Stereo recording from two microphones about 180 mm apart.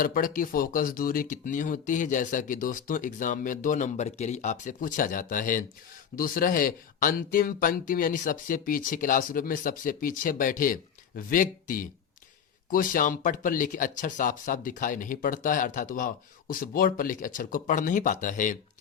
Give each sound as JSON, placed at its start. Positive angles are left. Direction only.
{"t": 0.0, "sound": "speech", "side_deg": 50}